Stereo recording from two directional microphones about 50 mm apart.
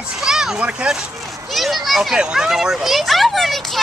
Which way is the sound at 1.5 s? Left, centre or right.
Centre.